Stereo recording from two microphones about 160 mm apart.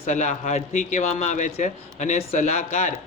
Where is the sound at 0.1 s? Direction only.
50° left (ahead or behind).